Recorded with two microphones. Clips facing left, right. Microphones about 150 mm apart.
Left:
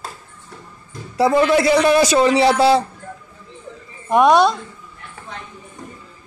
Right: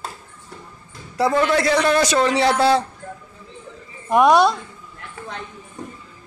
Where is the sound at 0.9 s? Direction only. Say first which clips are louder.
Left 3 dB; 5° left (ahead or behind).